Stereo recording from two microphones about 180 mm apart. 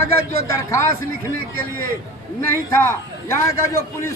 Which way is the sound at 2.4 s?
10° left (ahead or behind).